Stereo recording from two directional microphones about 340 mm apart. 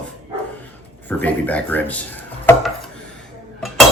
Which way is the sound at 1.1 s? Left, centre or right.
Centre.